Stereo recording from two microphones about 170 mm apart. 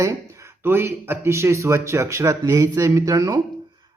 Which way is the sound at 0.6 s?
15° right (ahead or behind).